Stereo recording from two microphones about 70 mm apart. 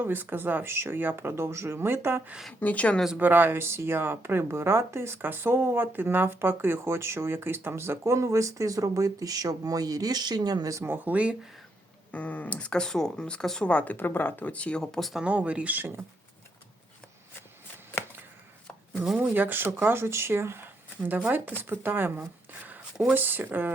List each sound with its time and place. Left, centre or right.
0.0 s speech: right
2.6 s speech: left
3.2 s speech: right
10.8 s speech: right
12.1 s speech: left
13.7 s speech: centre
15.2 s speech: centre
19.1 s speech: right
22.6 s a sound: right
23.1 s speech: right